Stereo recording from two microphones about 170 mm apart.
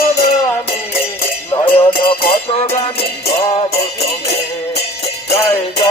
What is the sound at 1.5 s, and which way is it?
Music, 30° left (ahead or behind).